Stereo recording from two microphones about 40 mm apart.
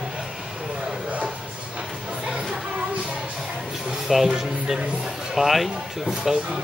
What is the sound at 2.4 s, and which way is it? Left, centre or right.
Music, centre.